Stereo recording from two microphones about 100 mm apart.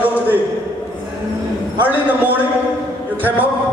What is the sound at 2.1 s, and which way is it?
Speech, 20° right (ahead or behind).